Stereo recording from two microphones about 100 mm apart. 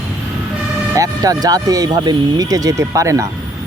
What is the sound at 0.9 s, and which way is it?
Speech, 35° right (ahead or behind).